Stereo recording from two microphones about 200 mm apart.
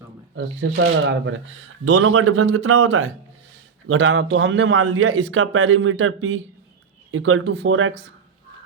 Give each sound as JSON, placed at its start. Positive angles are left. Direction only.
{"t": 1.0, "sound": "a man's voice", "side_deg": -70}